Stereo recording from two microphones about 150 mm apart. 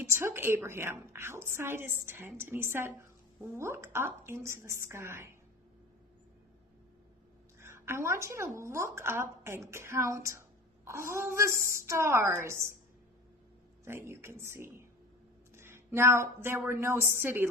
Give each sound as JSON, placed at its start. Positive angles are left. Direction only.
{"t": 0.0, "sound": "a woman's voice", "side_deg": -15}
{"t": 7.6, "sound": "a woman's voice", "side_deg": -15}
{"t": 13.8, "sound": "a woman's voice", "side_deg": -15}